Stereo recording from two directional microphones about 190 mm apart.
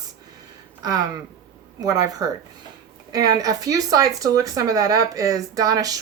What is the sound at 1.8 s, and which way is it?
A woman's voice, 20° right (ahead or behind).